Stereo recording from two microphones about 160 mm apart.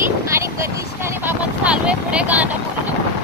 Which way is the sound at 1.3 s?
10° right (ahead or behind).